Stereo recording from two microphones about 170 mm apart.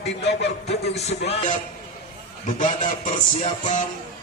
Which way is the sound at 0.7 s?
40° left (ahead or behind).